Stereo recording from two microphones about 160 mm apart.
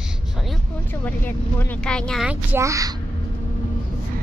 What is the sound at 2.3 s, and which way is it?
Speech, 15° right (ahead or behind).